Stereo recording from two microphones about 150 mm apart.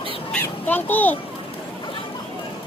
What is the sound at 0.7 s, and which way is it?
Speech, 10° left (ahead or behind).